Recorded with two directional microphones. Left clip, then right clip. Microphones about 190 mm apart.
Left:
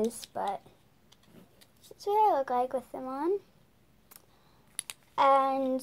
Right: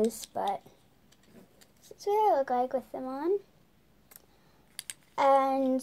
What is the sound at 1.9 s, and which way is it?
A child's voice, 5° right (ahead or behind).